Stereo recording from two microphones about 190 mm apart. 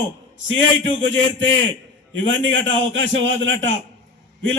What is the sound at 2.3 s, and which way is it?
Speech, 90° right.